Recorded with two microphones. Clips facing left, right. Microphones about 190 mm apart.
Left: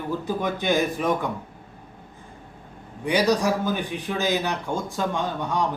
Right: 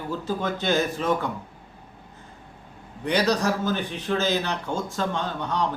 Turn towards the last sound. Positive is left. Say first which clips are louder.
# left 2 dB
turn(degrees=10)  # may be behind; listen again after turning